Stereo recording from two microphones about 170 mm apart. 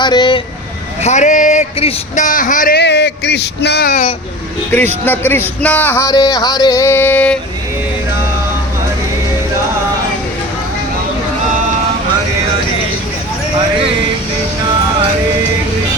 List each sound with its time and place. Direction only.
0.0 s vehicle: 25° left (ahead or behind)
1.0 s speech: 45° left (ahead or behind)
2.7 s speech: 85° left
3.8 s speech: 50° left (ahead or behind)
5.0 s music: 10° left (ahead or behind)